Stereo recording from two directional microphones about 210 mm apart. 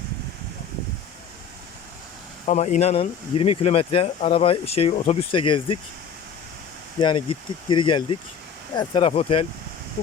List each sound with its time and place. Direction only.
2.5 s speech: 35° left (ahead or behind)
7.0 s speech: 20° left (ahead or behind)